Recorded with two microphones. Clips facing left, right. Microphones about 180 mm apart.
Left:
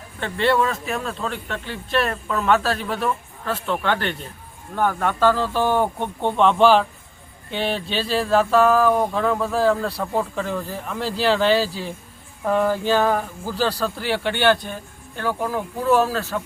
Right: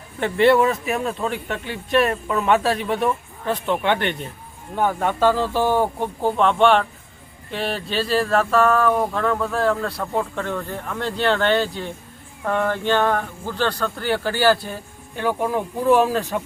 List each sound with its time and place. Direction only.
0.2 s speech: 20° right (ahead or behind)
2.4 s speech: centre (ahead or behind)
3.0 s speech: 20° right (ahead or behind)